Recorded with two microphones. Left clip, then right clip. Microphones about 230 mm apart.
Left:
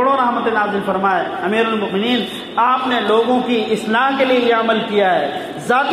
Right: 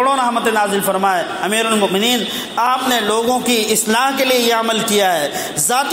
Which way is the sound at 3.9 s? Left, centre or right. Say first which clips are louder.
Left 1 dB; right.